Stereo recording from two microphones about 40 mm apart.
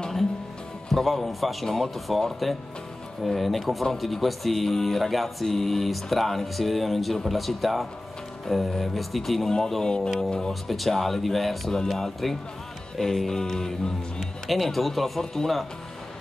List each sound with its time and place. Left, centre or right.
0.8 s music: centre
9.8 s speech: centre
10.5 s music: centre
12.9 s speech: centre
14.5 s music: centre